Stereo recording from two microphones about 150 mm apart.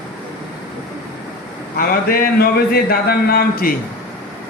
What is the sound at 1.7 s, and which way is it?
Speech, 75° left (ahead or behind).